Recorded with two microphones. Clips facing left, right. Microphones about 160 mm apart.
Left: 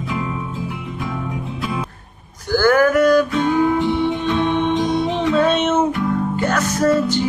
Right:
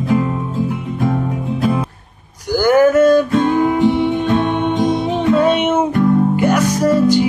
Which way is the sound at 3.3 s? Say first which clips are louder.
Right 3 dB; 50° right (ahead or behind).